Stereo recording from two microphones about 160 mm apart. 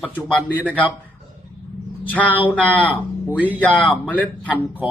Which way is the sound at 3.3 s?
10° right (ahead or behind).